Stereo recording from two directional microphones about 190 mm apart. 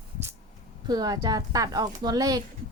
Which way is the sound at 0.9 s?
20° right (ahead or behind).